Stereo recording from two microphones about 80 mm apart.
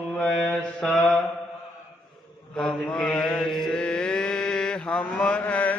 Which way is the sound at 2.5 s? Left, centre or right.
Centre.